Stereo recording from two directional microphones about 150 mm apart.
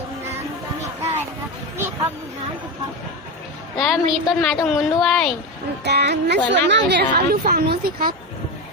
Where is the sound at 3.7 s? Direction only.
Centre (ahead or behind).